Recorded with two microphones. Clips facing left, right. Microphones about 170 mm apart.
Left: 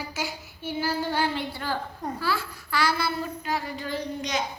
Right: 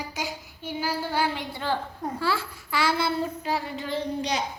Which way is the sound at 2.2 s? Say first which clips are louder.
Right 2 dB; 25° right (ahead or behind).